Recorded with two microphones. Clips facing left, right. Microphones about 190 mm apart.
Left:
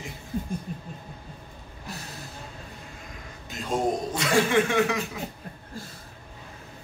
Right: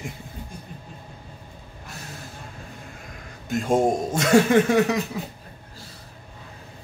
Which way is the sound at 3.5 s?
50° right (ahead or behind).